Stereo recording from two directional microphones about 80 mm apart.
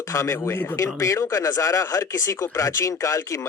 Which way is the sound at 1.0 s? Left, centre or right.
Left.